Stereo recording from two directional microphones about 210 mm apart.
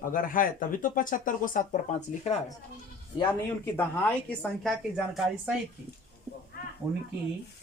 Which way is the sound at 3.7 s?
5° left (ahead or behind).